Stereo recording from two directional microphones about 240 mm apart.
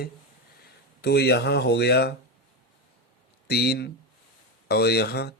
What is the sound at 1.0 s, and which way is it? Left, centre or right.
Speech, left.